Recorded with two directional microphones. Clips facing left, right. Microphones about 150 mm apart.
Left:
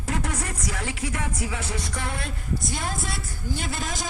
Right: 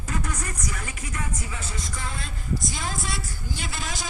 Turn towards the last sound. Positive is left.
turn(degrees=50)  # may be behind; listen again after turning